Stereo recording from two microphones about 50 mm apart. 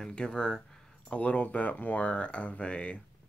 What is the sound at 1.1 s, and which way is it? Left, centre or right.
Speech, left.